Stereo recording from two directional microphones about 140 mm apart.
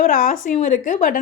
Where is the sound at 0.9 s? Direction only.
75° left (ahead or behind).